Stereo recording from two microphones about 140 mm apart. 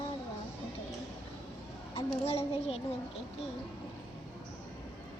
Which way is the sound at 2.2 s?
45° left (ahead or behind).